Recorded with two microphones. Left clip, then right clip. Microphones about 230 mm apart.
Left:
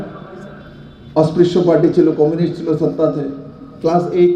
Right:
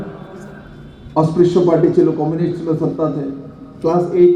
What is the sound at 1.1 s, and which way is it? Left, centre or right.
A man's voice, left.